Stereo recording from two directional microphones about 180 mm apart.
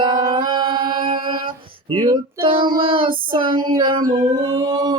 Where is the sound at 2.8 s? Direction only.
30° right (ahead or behind).